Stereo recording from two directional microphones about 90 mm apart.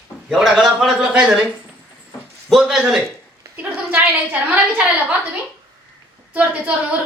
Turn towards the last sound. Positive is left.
turn(degrees=-15)  # may be behind; listen again after turning